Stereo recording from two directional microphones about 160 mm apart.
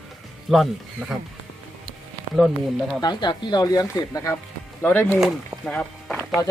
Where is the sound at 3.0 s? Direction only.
25° left (ahead or behind).